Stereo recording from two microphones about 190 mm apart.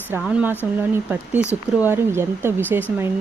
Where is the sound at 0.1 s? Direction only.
10° right (ahead or behind).